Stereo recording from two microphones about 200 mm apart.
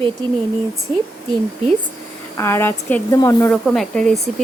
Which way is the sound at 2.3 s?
10° left (ahead or behind).